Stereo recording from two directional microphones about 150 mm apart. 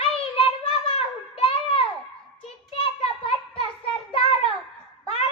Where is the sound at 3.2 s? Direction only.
40° left (ahead or behind).